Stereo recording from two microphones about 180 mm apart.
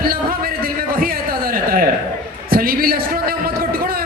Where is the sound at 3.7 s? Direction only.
55° right (ahead or behind).